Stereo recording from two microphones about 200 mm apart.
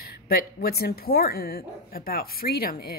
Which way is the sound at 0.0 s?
50° left (ahead or behind).